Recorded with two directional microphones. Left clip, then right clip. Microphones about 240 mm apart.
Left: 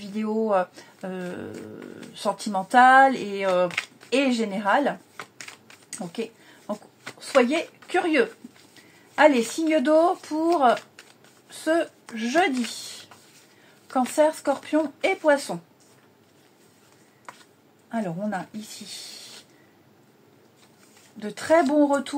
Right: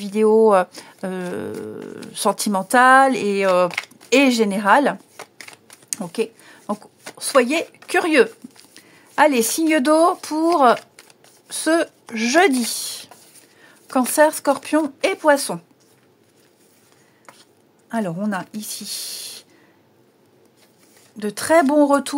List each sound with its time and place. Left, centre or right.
0.0 s speech: right
6.0 s speech: right
13.9 s speech: right
17.3 s a sound: centre
17.9 s speech: right
21.2 s speech: right